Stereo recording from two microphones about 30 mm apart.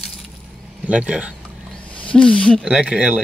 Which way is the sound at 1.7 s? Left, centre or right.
Left.